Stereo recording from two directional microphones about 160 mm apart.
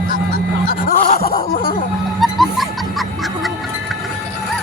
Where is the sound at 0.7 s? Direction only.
65° left (ahead or behind).